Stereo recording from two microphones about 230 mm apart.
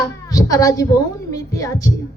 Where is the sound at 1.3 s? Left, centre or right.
Centre.